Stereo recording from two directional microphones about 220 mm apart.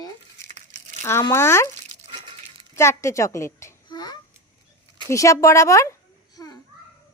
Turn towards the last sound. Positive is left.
turn(degrees=15)  # may be behind; listen again after turning